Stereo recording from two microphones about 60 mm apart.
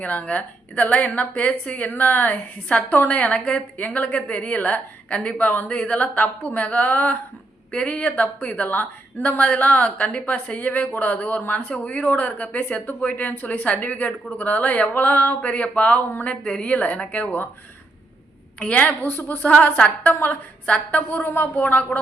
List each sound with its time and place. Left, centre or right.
0.0 s a woman's voice: left
12.5 s speech: left
12.8 s a woman's voice: left
18.6 s a woman's voice: centre
18.9 s a woman's voice: left